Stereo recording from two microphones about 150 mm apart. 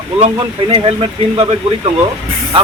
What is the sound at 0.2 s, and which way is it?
Speech, 35° right (ahead or behind).